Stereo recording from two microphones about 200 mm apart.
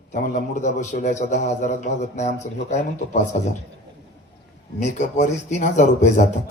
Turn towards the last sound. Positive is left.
turn(degrees=40)  # may be behind; listen again after turning